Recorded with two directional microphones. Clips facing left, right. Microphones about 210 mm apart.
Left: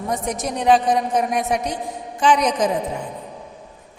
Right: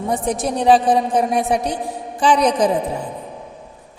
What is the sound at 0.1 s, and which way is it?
A woman's voice, 30° right (ahead or behind).